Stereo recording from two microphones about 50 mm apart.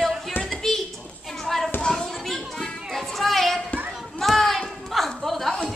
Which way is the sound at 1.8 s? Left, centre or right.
Centre.